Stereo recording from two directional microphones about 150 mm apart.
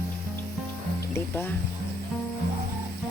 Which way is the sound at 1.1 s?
15° left (ahead or behind).